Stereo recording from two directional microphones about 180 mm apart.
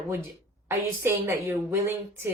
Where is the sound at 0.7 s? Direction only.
10° right (ahead or behind).